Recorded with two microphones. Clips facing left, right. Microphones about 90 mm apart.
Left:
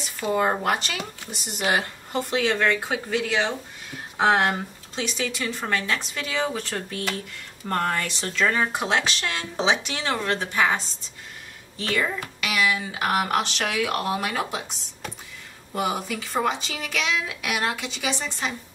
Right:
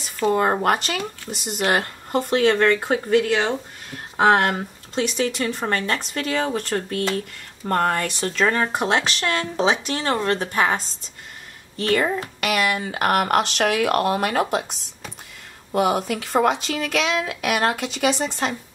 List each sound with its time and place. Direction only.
0.3 s speech: 40° right (ahead or behind)
11.9 s speech: 45° right (ahead or behind)
15.7 s speech: 65° right (ahead or behind)